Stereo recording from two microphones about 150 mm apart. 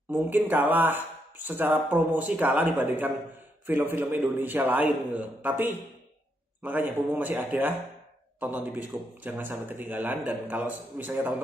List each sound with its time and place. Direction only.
0.1 s speech: 15° right (ahead or behind)